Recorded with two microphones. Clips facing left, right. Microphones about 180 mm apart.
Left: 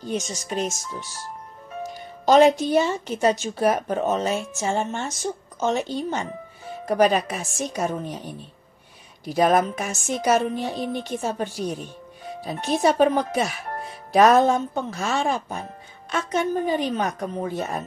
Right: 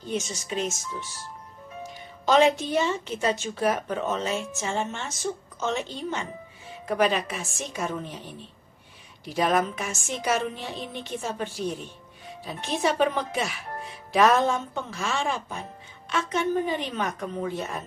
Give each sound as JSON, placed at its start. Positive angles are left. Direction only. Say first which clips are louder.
{"t": 0.0, "sound": "a woman's voice", "louder": "left 2 dB", "side_deg": 40}
{"t": 2.2, "sound": "a woman's voice", "louder": "left 5 dB", "side_deg": 40}
{"t": 9.2, "sound": "a woman's voice", "louder": "left 5 dB", "side_deg": 40}